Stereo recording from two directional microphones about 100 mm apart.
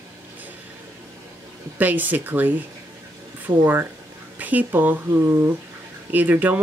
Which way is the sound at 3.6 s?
25° right (ahead or behind).